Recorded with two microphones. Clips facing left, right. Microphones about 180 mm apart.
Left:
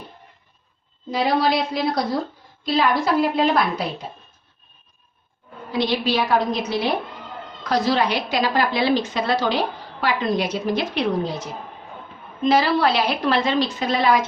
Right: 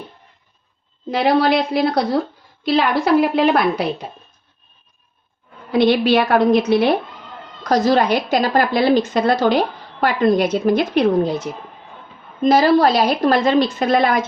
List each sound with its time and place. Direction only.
1.1 s a woman's voice: 65° right (ahead or behind)
5.7 s a woman's voice: 60° right (ahead or behind)
7.6 s a woman's voice: 45° right (ahead or behind)